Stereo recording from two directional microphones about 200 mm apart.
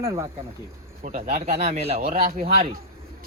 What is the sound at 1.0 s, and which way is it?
Speech, 40° right (ahead or behind).